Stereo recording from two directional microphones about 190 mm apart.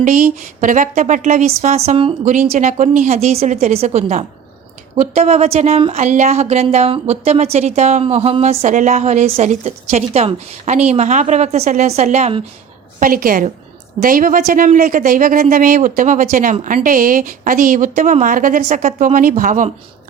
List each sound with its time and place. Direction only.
0.0 s speech: 45° right (ahead or behind)
13.0 s speech: 50° right (ahead or behind)